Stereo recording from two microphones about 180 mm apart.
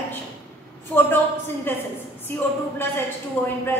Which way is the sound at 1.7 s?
10° left (ahead or behind).